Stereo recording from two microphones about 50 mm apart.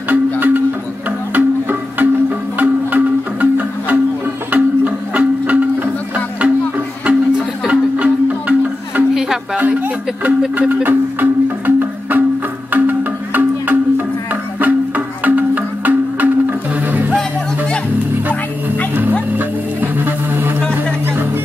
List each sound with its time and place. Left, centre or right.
0.1 s music: right
7.1 s music: right
10.7 s music: right
19.3 s music: right